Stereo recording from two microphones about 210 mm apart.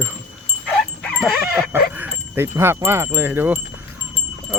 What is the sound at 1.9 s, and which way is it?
Wind chime, 10° right (ahead or behind).